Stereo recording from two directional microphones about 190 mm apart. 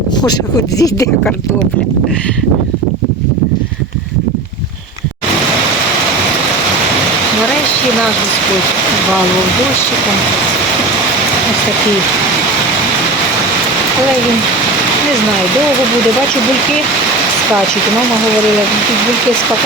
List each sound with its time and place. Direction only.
0.2 s speech: 20° left (ahead or behind)